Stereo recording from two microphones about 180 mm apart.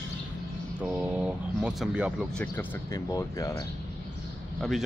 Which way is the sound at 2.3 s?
15° left (ahead or behind).